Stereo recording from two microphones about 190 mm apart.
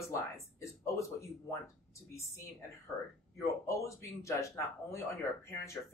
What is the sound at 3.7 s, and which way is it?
Speech, 15° left (ahead or behind).